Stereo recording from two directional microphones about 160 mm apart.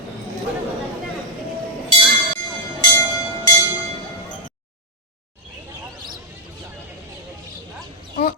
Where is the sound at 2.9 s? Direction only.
20° left (ahead or behind).